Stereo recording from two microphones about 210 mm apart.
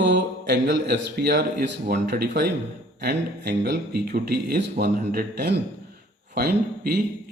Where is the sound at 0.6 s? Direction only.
50° right (ahead or behind).